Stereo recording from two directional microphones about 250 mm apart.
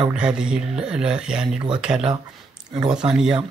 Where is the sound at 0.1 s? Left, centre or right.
Centre.